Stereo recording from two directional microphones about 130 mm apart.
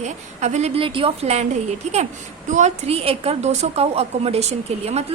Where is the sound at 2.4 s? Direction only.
70° right (ahead or behind).